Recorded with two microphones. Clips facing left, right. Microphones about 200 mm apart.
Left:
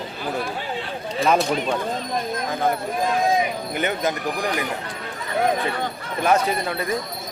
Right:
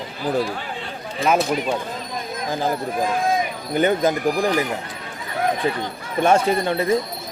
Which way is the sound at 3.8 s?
35° right (ahead or behind).